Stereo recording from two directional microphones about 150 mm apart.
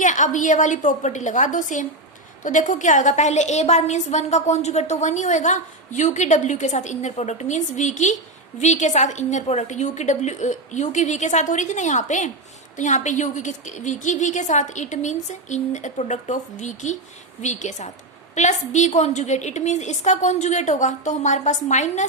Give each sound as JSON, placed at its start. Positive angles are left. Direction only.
{"t": 0.0, "sound": "a woman's voice", "side_deg": 55}